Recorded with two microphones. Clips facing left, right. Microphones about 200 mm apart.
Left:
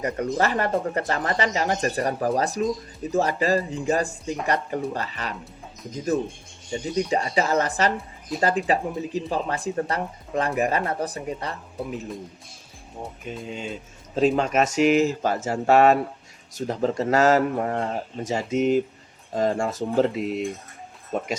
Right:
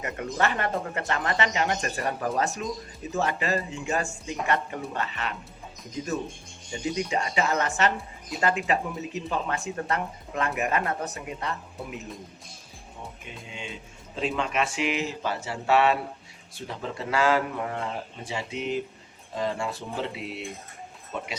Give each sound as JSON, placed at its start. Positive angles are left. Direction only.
{"t": 0.0, "sound": "speech", "side_deg": 35}
{"t": 7.1, "sound": "speech", "side_deg": 35}
{"t": 13.5, "sound": "speech", "side_deg": 40}